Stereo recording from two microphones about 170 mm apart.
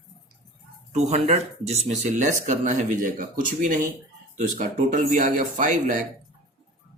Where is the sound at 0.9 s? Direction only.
40° right (ahead or behind).